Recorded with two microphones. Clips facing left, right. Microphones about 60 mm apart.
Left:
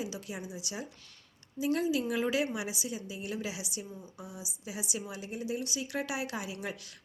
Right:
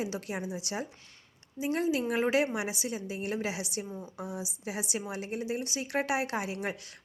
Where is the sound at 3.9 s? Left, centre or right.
Right.